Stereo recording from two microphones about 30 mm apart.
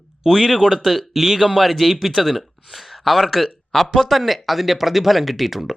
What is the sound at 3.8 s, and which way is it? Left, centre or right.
Speech, centre.